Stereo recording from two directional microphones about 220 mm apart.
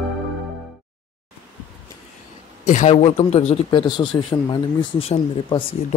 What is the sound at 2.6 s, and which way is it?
Speech, 35° left (ahead or behind).